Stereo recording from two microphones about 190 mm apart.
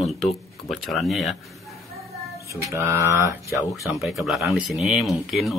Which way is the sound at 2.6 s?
15° right (ahead or behind).